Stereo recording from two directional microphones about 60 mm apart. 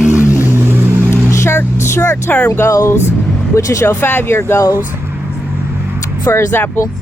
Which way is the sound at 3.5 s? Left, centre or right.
Left.